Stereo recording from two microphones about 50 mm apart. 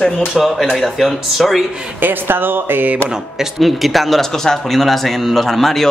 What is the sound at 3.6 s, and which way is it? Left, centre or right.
Speech, centre.